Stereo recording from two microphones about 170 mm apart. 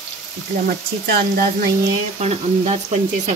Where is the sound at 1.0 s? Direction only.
60° right (ahead or behind).